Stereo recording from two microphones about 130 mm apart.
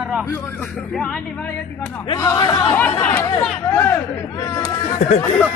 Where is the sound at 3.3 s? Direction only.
5° left (ahead or behind).